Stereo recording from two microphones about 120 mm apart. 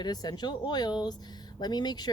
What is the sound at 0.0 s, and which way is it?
Speech, 35° left (ahead or behind).